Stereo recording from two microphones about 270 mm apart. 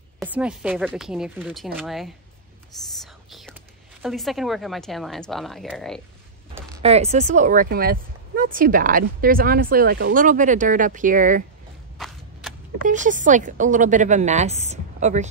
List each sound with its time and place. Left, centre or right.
0.2 s a woman's voice: centre
3.0 s whispering: centre
4.0 s a woman's voice: centre
6.8 s a woman's voice: right
12.0 s a sound: centre
12.8 s a woman's voice: right